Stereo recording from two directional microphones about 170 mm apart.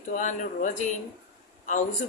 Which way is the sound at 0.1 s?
45° left (ahead or behind).